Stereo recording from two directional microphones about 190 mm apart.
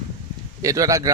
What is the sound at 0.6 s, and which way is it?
Speech, 20° right (ahead or behind).